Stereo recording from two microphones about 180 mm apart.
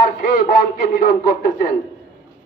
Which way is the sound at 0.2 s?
50° left (ahead or behind).